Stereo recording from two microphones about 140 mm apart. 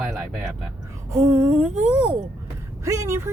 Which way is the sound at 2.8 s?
20° right (ahead or behind).